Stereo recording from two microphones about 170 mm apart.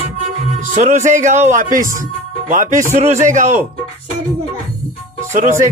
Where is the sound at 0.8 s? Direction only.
45° right (ahead or behind).